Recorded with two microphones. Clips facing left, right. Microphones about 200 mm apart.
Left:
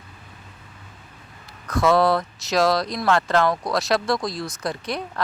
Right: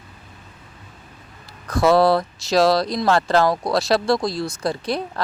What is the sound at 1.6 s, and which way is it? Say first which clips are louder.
Speech: right 3 dB; 35° right (ahead or behind).